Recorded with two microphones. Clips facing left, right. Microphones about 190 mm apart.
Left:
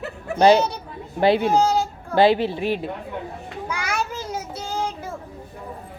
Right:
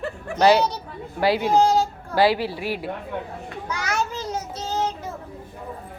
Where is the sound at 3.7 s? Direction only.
10° left (ahead or behind).